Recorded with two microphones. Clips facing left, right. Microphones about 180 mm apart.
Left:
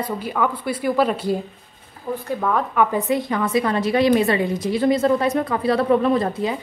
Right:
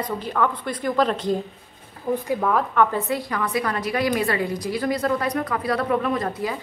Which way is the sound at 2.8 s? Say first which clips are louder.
Left 2 dB; 15° left (ahead or behind).